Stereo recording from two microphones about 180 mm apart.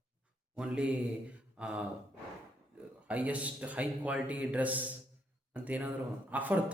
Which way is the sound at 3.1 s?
10° right (ahead or behind).